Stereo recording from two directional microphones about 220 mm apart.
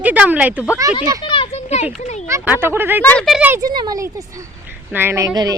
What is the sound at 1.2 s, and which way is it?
Children playing, 25° left (ahead or behind).